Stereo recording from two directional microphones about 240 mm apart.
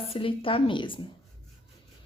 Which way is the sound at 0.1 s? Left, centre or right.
Left.